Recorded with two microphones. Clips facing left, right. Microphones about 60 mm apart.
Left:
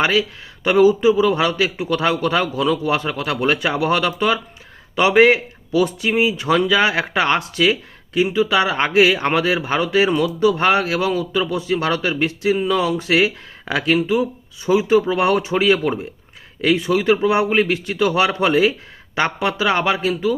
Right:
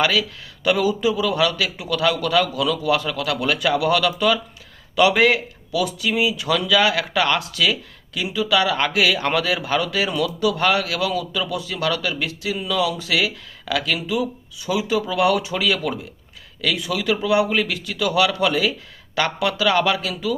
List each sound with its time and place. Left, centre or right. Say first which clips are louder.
0.0 s a man's voice: left 2 dB; left